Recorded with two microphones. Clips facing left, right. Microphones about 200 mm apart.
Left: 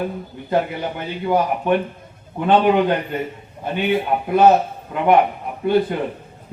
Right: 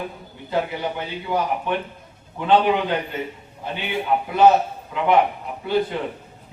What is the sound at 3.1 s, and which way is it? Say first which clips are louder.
Speech: left 4 dB; 50° left (ahead or behind).